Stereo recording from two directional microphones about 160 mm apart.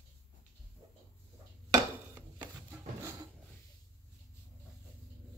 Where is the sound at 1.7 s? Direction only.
25° right (ahead or behind).